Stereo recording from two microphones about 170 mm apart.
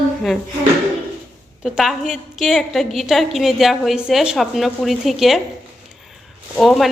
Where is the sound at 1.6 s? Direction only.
Centre (ahead or behind).